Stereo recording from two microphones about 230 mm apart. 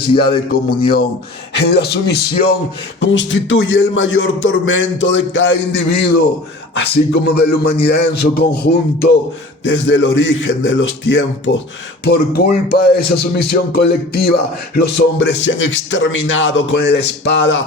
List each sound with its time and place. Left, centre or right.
0.2 s a man's voice: left
12.0 s speech: left